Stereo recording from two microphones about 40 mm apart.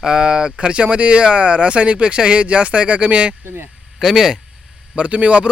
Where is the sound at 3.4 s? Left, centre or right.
Right.